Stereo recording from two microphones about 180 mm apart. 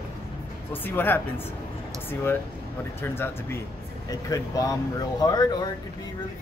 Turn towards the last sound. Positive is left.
turn(degrees=20)  # may be behind; listen again after turning